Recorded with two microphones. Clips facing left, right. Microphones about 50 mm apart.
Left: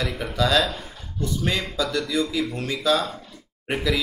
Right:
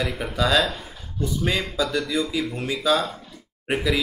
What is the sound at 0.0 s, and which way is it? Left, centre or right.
Speech, centre.